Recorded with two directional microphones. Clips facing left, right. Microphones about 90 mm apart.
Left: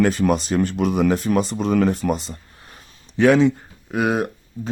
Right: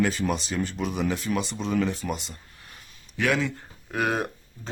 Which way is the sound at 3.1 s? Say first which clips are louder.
Left 11 dB; 30° left (ahead or behind).